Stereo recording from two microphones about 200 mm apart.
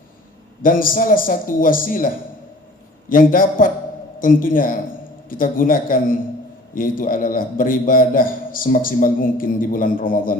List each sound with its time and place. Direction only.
0.6 s a man's voice: 45° left (ahead or behind)
3.1 s a man's voice: 45° left (ahead or behind)